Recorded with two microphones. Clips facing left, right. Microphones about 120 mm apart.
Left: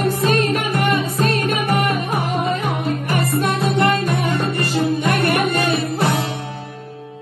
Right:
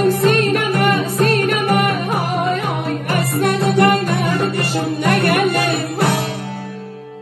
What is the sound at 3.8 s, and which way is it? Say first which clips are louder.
Music: right 3 dB; 60° right (ahead or behind).